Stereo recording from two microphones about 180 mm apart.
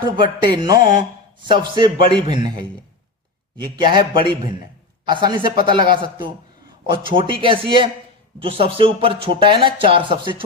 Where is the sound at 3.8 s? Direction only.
25° right (ahead or behind).